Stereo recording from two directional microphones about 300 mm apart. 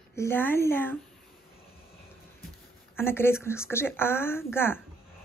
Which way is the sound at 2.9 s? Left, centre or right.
Centre.